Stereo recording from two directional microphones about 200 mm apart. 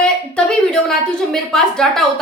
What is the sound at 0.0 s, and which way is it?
A woman's voice, 5° left (ahead or behind).